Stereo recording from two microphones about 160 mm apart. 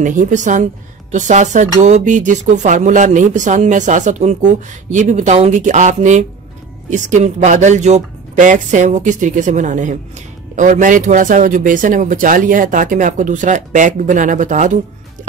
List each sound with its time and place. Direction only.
0.0 s speech: 55° right (ahead or behind)